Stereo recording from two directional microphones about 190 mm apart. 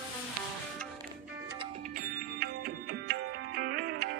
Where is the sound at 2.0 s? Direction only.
50° right (ahead or behind).